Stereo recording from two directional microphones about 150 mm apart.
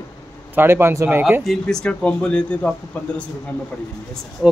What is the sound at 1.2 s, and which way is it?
Speech, centre (ahead or behind).